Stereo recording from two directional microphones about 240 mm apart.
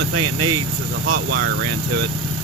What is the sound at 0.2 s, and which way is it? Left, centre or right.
Speech, right.